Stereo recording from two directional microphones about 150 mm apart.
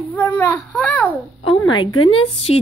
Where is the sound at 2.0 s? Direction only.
40° left (ahead or behind).